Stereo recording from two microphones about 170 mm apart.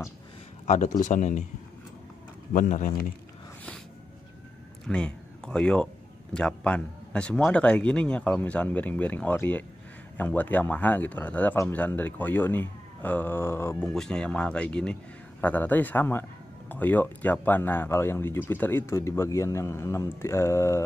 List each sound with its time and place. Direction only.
0.7 s a man's voice: 45° left (ahead or behind)
2.5 s a man's voice: 50° left (ahead or behind)
4.8 s speech: 5° left (ahead or behind)
13.8 s speech: 5° left (ahead or behind)